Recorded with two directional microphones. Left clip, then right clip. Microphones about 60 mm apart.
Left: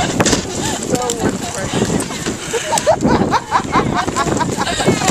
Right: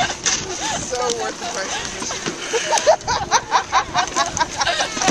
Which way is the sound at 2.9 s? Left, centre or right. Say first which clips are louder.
Left 4 dB; right.